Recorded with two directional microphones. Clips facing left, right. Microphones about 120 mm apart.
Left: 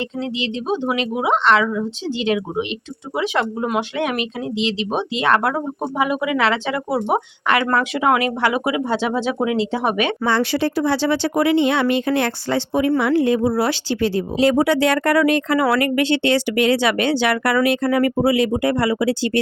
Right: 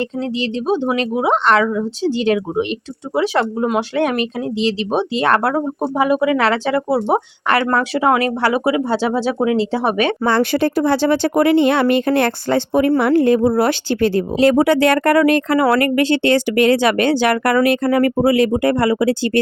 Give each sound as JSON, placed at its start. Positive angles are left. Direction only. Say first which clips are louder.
{"t": 0.0, "sound": "speech", "louder": "right 4 dB", "side_deg": -40}
{"t": 10.2, "sound": "speech", "louder": "right 3 dB", "side_deg": -50}